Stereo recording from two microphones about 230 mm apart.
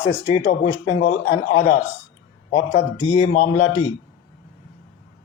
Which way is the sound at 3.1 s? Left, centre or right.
Left.